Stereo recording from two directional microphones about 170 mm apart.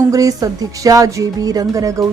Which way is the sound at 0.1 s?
20° right (ahead or behind).